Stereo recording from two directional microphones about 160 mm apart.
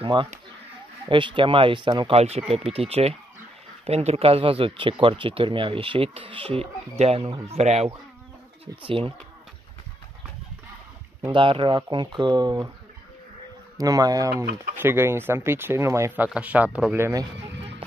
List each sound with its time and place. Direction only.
0.0 s speech: 30° right (ahead or behind)
11.2 s speech: 30° right (ahead or behind)
13.7 s speech: 20° right (ahead or behind)